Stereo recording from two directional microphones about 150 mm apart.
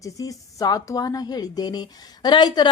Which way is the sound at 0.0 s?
25° left (ahead or behind).